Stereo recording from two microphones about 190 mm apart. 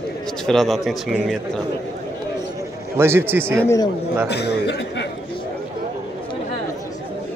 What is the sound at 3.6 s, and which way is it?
Speech, 15° left (ahead or behind).